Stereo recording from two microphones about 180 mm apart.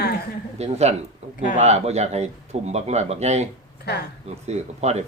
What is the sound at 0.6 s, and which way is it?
Speech, 35° right (ahead or behind).